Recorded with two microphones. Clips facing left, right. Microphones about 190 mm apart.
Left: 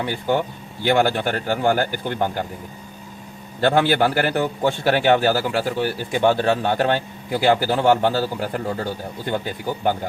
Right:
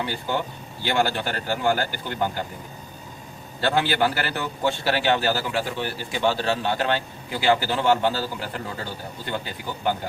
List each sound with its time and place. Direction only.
0.0 s a man's voice: 50° left (ahead or behind)
3.6 s a man's voice: 50° left (ahead or behind)